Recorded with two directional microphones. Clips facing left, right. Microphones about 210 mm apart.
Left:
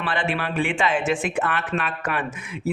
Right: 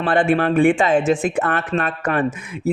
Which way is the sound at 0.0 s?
50° right (ahead or behind).